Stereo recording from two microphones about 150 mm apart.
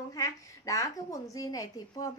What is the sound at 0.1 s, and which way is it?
A woman's voice, 20° left (ahead or behind).